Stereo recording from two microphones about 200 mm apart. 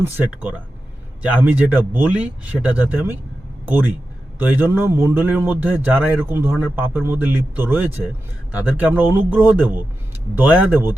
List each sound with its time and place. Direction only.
0.0 s speech: 10° right (ahead or behind)
4.4 s speech: 10° right (ahead or behind)